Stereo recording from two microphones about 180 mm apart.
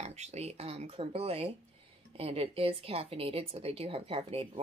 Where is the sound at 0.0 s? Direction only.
35° right (ahead or behind).